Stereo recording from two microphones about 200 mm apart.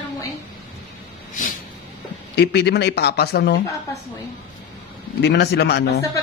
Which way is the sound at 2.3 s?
55° left (ahead or behind).